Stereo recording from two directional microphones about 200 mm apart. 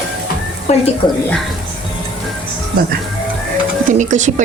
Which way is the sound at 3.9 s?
35° right (ahead or behind).